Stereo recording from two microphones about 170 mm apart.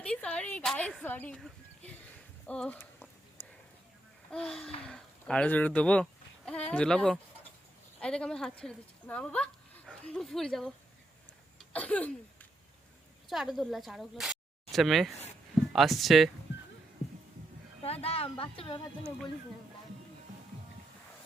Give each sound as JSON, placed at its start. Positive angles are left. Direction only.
{"t": 0.0, "sound": "speech", "side_deg": 5}
{"t": 2.5, "sound": "speech", "side_deg": 10}
{"t": 4.3, "sound": "a woman's voice", "side_deg": 5}
{"t": 11.7, "sound": "a sound", "side_deg": 10}
{"t": 13.3, "sound": "speech", "side_deg": 0}
{"t": 17.8, "sound": "a woman's voice", "side_deg": 35}